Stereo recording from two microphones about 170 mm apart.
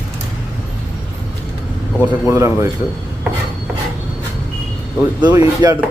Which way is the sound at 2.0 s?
15° right (ahead or behind).